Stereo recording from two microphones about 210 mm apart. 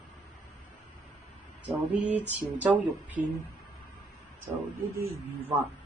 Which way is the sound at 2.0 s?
35° right (ahead or behind).